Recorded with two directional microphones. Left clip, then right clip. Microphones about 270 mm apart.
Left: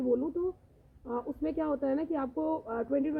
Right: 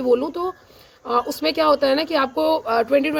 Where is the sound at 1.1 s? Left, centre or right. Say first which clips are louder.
Right 14 dB; centre.